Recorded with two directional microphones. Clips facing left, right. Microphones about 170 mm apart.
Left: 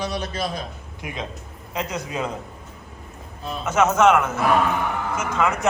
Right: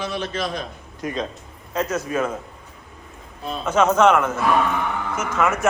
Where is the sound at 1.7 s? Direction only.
15° left (ahead or behind).